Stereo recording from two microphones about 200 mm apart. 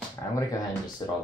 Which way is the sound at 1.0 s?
20° left (ahead or behind).